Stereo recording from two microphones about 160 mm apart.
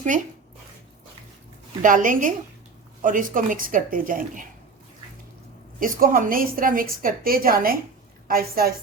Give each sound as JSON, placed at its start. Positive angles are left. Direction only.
{"t": 0.0, "sound": "speech", "side_deg": -55}
{"t": 1.8, "sound": "speech", "side_deg": -55}
{"t": 5.8, "sound": "a woman's voice", "side_deg": -60}